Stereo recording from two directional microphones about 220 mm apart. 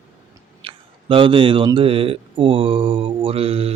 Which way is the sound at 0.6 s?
25° right (ahead or behind).